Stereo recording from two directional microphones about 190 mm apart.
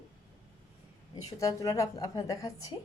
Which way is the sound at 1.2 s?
15° left (ahead or behind).